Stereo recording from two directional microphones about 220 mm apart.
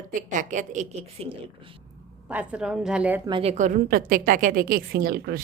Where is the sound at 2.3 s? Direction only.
5° right (ahead or behind).